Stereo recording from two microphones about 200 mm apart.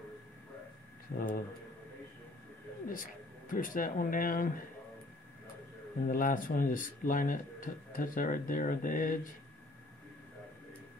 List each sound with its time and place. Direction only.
1.1 s speech: 45° left (ahead or behind)
2.9 s speech: 45° left (ahead or behind)
6.0 s speech: 45° left (ahead or behind)